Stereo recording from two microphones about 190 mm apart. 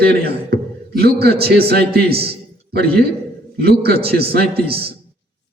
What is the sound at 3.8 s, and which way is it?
Speech, 55° right (ahead or behind).